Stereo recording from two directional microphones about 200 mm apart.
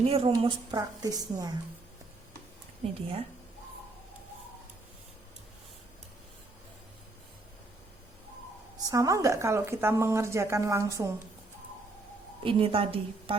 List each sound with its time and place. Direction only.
0.0 s speech: 30° right (ahead or behind)
8.9 s speech: 15° right (ahead or behind)
12.4 s speech: 25° right (ahead or behind)